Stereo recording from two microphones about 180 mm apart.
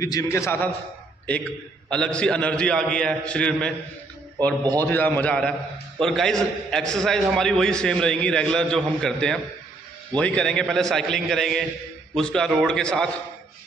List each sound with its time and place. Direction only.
0.0 s a man's voice: 20° left (ahead or behind)
4.7 s a man's voice: 10° left (ahead or behind)